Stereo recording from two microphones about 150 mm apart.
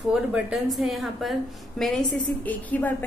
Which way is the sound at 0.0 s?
5° right (ahead or behind).